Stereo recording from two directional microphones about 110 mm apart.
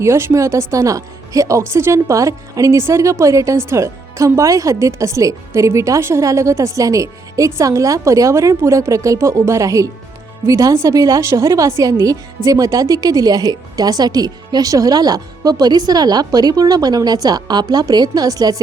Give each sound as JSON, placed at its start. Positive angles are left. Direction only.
{"t": 0.0, "sound": "a woman's voice", "side_deg": -25}